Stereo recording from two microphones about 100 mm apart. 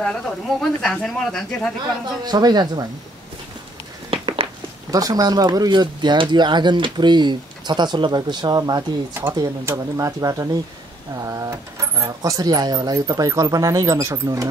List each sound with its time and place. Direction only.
0.0 s speech: 5° left (ahead or behind)
2.2 s speech: 45° right (ahead or behind)
4.1 s a sound: 65° right (ahead or behind)
4.9 s speech: 40° right (ahead or behind)